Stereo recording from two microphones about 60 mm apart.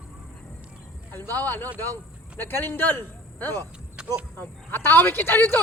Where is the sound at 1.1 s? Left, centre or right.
Left.